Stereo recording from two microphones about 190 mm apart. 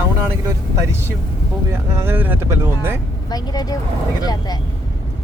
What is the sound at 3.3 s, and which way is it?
Speech, 20° left (ahead or behind).